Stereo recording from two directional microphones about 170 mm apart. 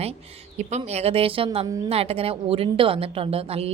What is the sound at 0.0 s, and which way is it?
Speech, 40° right (ahead or behind).